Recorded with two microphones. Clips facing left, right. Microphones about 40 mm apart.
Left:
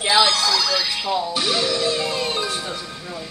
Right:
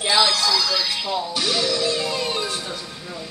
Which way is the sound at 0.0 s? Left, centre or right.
Centre.